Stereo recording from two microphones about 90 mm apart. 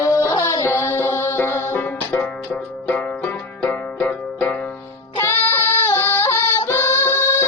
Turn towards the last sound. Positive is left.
turn(degrees=30)  # may be behind; listen again after turning